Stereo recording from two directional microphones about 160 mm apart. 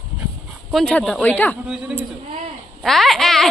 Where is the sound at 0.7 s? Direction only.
5° left (ahead or behind).